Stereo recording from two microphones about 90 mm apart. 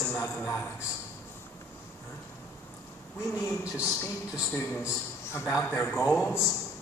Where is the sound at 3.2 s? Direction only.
35° left (ahead or behind).